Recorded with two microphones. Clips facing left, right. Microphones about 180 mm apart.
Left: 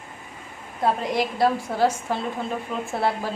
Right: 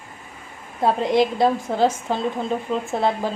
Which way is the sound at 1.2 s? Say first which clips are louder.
Right 4 dB; 20° right (ahead or behind).